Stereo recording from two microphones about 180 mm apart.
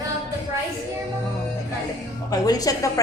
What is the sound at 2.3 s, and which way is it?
Speech, 20° left (ahead or behind).